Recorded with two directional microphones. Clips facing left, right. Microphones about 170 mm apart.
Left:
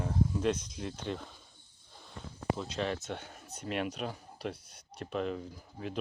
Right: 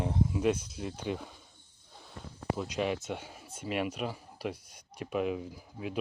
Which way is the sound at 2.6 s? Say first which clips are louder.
Right 3 dB; 10° right (ahead or behind).